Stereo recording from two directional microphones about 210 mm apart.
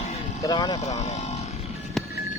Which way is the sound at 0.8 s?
35° left (ahead or behind).